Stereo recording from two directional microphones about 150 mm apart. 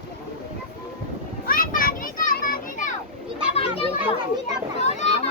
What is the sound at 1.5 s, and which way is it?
Children playing, 70° left (ahead or behind).